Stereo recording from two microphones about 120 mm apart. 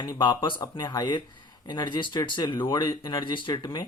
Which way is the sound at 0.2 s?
40° left (ahead or behind).